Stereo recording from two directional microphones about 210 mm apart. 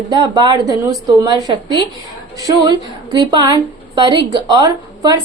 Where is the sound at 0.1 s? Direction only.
20° right (ahead or behind).